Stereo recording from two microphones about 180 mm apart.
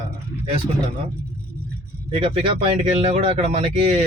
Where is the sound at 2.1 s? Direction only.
35° right (ahead or behind).